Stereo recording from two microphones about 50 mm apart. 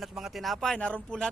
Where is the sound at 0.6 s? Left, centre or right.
Centre.